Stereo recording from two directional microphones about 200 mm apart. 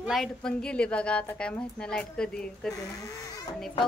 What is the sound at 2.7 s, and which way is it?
Speech, 15° left (ahead or behind).